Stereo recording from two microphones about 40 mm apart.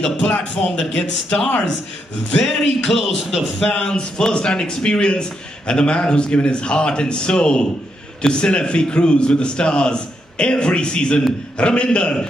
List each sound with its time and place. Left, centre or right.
0.0 s speech: centre
0.9 s speech: centre
3.6 s a man's voice: left